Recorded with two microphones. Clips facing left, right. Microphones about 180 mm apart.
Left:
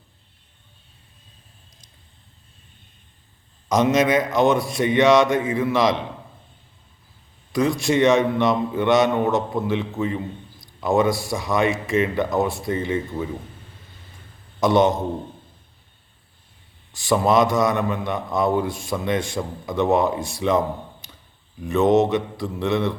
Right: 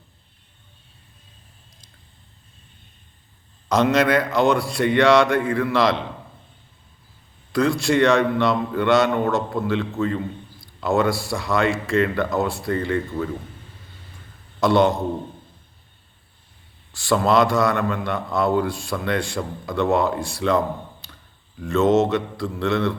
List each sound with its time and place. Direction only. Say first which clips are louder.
3.7 s a man's voice: even; 15° left (ahead or behind)
7.5 s a man's voice: right 1 dB; 20° left (ahead or behind)
14.6 s a man's voice: even; 20° left (ahead or behind)
16.9 s a man's voice: even; 20° left (ahead or behind)
21.6 s mantra: even; 15° left (ahead or behind)